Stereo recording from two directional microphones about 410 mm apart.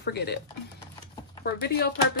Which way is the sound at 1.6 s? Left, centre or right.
Left.